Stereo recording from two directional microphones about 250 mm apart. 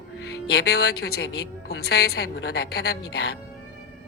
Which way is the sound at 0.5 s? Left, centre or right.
Left.